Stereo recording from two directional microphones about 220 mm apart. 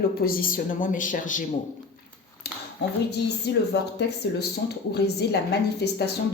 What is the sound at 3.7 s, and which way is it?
A woman's voice, 50° left (ahead or behind).